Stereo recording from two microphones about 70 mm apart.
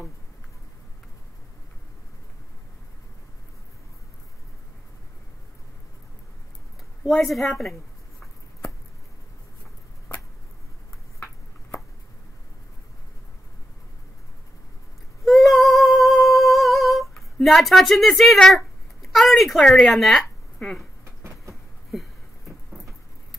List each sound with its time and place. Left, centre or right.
7.1 s a woman's voice: centre
15.2 s female singing: centre
19.1 s a woman's voice: centre
20.5 s a sound: centre
21.0 s vehicle: right
21.9 s a sound: centre